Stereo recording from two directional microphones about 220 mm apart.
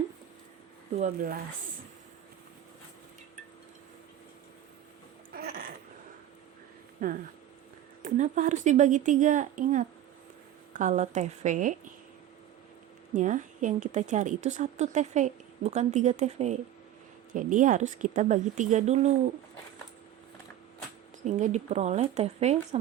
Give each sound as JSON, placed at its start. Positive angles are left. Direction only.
{"t": 0.9, "sound": "a woman's voice", "side_deg": -35}
{"t": 5.3, "sound": "a sound", "side_deg": -45}
{"t": 7.0, "sound": "a woman's voice", "side_deg": -40}
{"t": 13.1, "sound": "a woman's voice", "side_deg": -35}
{"t": 21.2, "sound": "a woman's voice", "side_deg": -35}